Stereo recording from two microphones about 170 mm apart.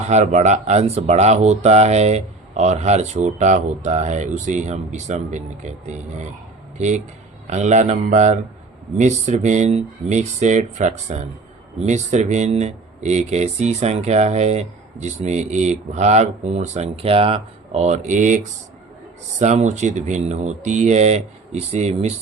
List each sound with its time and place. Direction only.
0.0 s speech: 40° right (ahead or behind)